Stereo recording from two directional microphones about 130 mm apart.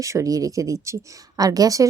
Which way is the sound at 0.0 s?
25° right (ahead or behind).